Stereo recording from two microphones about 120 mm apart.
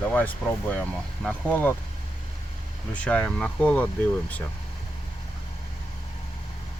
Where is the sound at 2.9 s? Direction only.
10° left (ahead or behind).